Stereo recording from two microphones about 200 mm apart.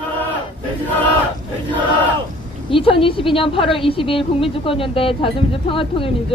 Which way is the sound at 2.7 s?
25° left (ahead or behind).